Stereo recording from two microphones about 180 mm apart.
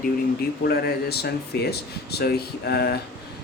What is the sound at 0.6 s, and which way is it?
Speech, 60° left (ahead or behind).